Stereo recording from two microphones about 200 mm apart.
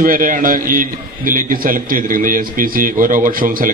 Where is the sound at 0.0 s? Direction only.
45° right (ahead or behind).